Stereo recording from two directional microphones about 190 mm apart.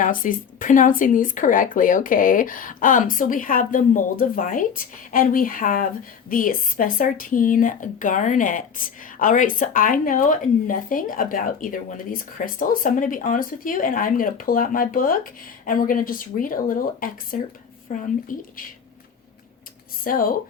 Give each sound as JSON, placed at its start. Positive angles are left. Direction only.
{"t": 0.0, "sound": "speech", "side_deg": 45}
{"t": 20.1, "sound": "speech", "side_deg": 45}